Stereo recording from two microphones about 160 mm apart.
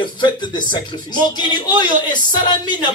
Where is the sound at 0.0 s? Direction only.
25° left (ahead or behind).